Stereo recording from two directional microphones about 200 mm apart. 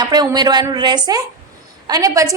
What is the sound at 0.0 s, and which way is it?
A woman's voice, 20° right (ahead or behind).